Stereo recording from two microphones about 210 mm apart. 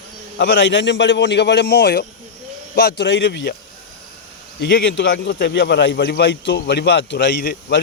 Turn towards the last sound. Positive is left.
turn(degrees=50)  # may be behind; listen again after turning